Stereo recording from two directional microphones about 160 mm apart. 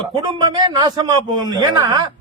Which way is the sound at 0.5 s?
25° right (ahead or behind).